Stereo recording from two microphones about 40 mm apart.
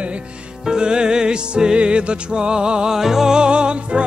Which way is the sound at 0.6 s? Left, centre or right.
Centre.